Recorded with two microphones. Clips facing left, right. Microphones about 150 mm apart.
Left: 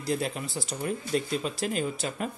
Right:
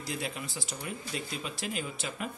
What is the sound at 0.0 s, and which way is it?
Speech, 40° left (ahead or behind).